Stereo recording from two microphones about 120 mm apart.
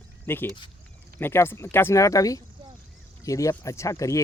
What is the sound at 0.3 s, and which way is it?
Speech, 20° left (ahead or behind).